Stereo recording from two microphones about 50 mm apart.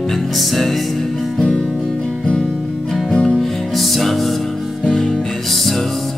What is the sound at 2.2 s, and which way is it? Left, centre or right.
Music, centre.